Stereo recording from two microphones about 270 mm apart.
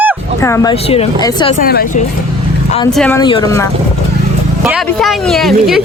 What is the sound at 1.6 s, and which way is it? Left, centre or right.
Speech, left.